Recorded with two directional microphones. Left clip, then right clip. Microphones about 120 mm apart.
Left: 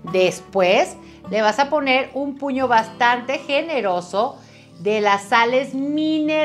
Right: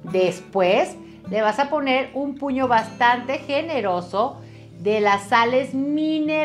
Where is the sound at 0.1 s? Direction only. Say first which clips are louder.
Left 2 dB; 10° right (ahead or behind).